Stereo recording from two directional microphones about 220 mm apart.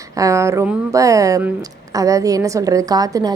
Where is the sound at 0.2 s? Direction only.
15° right (ahead or behind).